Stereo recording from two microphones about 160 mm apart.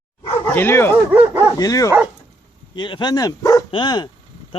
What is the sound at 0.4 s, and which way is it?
Speech, 10° left (ahead or behind).